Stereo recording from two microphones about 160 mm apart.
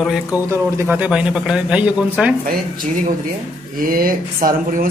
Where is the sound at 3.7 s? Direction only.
65° right (ahead or behind).